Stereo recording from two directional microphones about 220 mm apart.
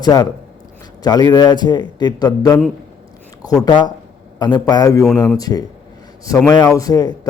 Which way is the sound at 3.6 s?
20° left (ahead or behind).